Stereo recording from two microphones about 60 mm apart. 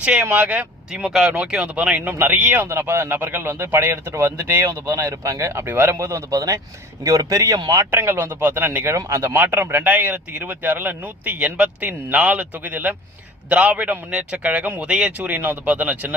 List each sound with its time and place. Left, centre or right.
0.0 s a man's voice: centre
2.0 s speech: right
2.6 s speech: right
5.6 s speech: right
6.3 s speech: right
7.9 s speech: right
11.3 s a man's voice: centre
14.8 s a man's voice: centre